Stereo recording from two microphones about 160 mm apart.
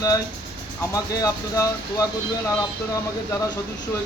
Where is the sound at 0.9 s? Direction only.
20° left (ahead or behind).